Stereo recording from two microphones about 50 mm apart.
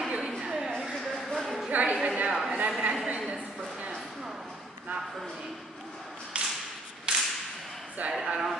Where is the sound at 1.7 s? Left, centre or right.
Right.